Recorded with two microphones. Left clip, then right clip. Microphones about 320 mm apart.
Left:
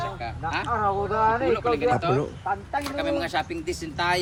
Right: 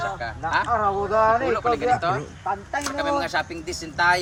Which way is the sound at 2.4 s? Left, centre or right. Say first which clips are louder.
Right 1 dB; right.